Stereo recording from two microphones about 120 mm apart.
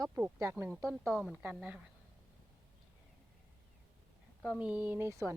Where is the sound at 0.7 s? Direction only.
Centre (ahead or behind).